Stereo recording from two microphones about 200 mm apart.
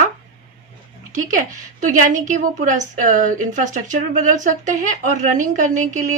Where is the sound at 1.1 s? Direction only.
40° right (ahead or behind).